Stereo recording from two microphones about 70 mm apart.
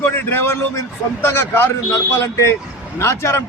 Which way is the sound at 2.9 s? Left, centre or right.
Left.